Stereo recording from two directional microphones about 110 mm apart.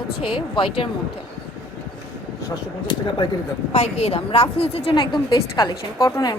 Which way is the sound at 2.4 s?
45° left (ahead or behind).